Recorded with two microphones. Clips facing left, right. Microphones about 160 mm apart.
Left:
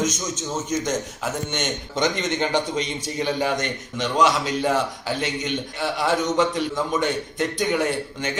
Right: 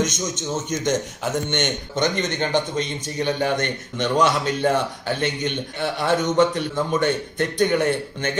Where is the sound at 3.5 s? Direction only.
60° right (ahead or behind).